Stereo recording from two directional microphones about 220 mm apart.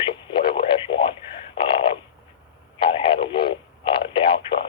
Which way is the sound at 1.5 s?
25° left (ahead or behind).